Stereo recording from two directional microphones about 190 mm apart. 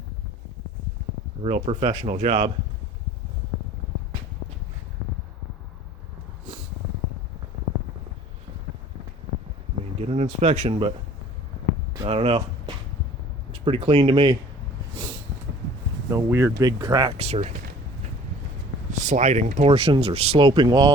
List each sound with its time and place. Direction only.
1.4 s speech: 30° right (ahead or behind)
10.0 s speech: 35° right (ahead or behind)
12.0 s speech: 30° right (ahead or behind)
16.0 s speech: 15° right (ahead or behind)
17.2 s speech: 35° right (ahead or behind)
19.0 s speech: 40° right (ahead or behind); by 20.9 s 20° right (ahead or behind)